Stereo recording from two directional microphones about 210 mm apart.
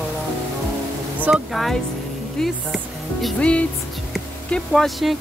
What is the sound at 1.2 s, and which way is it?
Speech, centre (ahead or behind).